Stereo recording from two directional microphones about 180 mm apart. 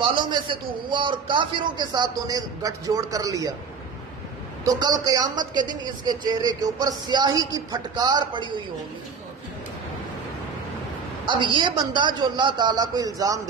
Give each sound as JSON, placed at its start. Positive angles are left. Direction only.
{"t": 0.0, "sound": "a man's voice", "side_deg": -25}
{"t": 4.6, "sound": "a man's voice", "side_deg": -25}
{"t": 11.2, "sound": "a man's voice", "side_deg": -25}